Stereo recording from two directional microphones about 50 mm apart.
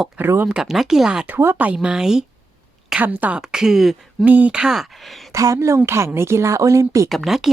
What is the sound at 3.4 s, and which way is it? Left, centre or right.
Speech, centre.